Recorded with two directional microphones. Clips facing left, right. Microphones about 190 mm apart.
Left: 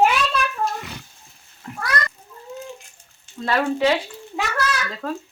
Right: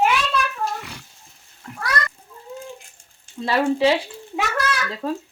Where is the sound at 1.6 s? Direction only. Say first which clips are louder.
Left 3 dB; 5° left (ahead or behind).